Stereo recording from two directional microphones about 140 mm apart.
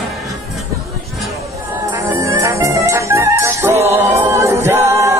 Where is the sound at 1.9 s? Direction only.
20° right (ahead or behind).